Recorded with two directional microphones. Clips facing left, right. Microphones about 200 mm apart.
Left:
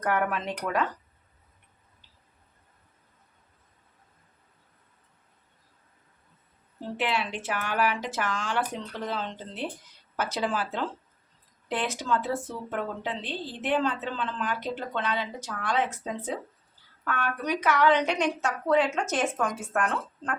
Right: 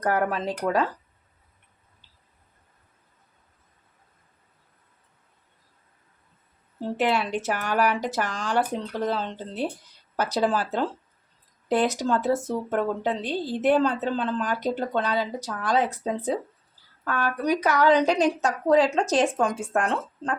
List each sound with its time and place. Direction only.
0.0 s speech: 35° right (ahead or behind)
6.9 s speech: 40° right (ahead or behind)